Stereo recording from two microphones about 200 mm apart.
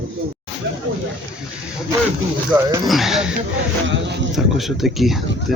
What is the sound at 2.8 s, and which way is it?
Speech, centre (ahead or behind).